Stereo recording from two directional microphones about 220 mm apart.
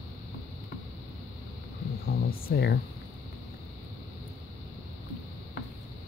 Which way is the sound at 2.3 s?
45° left (ahead or behind).